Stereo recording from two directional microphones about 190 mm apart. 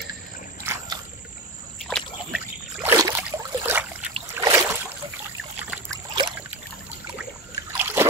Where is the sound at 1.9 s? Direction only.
Centre (ahead or behind).